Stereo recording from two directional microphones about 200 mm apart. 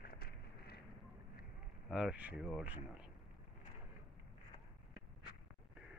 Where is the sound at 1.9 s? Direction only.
5° right (ahead or behind).